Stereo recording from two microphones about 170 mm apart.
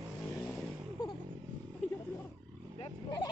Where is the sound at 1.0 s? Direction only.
20° left (ahead or behind).